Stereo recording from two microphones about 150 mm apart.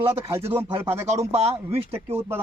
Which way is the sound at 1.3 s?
40° right (ahead or behind).